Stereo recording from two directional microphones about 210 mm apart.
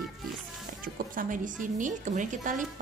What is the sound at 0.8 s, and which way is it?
Speech, 40° right (ahead or behind).